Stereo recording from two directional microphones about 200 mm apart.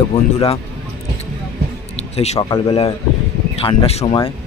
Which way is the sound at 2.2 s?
30° left (ahead or behind).